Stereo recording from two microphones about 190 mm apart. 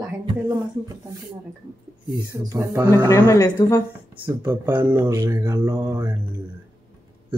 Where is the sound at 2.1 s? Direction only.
15° right (ahead or behind).